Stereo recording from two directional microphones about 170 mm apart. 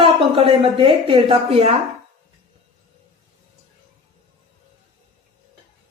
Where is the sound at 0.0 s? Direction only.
35° right (ahead or behind).